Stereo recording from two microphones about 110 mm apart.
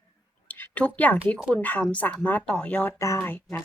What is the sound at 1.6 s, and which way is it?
Speech, 15° left (ahead or behind).